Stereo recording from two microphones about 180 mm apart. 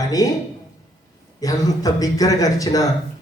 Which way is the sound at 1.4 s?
20° left (ahead or behind).